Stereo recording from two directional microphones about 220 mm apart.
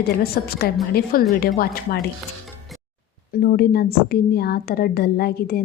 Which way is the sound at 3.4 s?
45° left (ahead or behind).